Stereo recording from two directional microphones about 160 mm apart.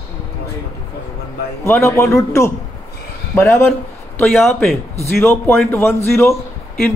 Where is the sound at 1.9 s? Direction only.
20° left (ahead or behind).